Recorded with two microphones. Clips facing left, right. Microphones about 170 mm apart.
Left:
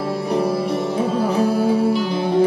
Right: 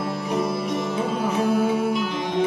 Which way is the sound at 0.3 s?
35° left (ahead or behind).